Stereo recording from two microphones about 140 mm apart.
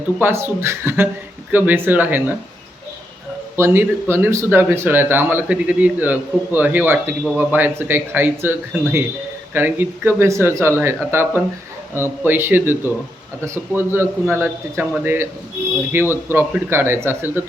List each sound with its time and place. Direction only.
0.2 s speech: 15° right (ahead or behind)
3.5 s speech: 15° right (ahead or behind)
9.6 s speech: 15° right (ahead or behind)